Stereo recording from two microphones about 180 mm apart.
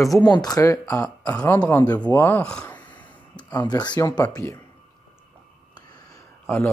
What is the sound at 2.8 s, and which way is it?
Speech, 25° left (ahead or behind).